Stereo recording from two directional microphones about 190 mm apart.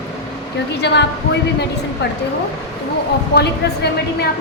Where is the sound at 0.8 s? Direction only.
65° left (ahead or behind).